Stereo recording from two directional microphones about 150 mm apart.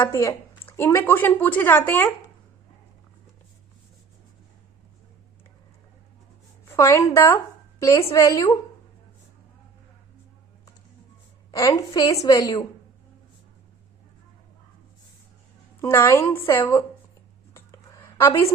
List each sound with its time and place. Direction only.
0.0 s a woman's voice: 20° left (ahead or behind)
6.7 s a woman's voice: 20° left (ahead or behind)
11.5 s a woman's voice: 25° left (ahead or behind)
15.8 s speech: 20° left (ahead or behind)
17.5 s a sound: 20° left (ahead or behind)